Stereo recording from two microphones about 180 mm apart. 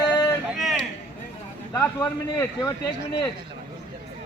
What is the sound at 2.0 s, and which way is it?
A man's voice, 20° left (ahead or behind).